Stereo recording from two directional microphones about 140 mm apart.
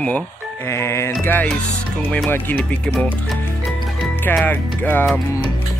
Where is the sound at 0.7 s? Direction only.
20° left (ahead or behind).